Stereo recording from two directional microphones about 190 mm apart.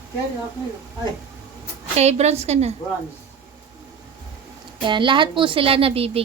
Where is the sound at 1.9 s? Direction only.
35° right (ahead or behind).